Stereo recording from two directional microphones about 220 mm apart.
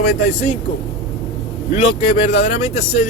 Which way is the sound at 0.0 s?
35° left (ahead or behind).